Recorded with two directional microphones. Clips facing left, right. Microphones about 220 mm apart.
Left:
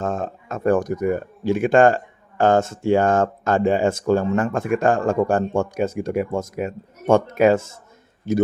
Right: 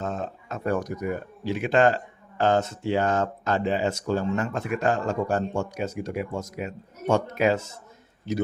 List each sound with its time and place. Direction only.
0.0 s speech: 50° left (ahead or behind)